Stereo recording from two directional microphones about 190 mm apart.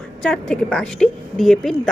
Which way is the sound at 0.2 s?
5° left (ahead or behind).